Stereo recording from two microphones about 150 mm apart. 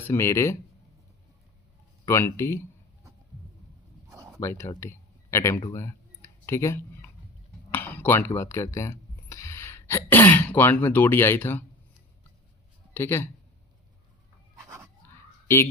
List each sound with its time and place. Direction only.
0.0 s speech: 15° left (ahead or behind)
2.0 s speech: 20° left (ahead or behind)
4.1 s a sound: 20° right (ahead or behind)
4.4 s speech: 15° left (ahead or behind)
12.9 s speech: 15° left (ahead or behind)
15.0 s a sound: 15° left (ahead or behind)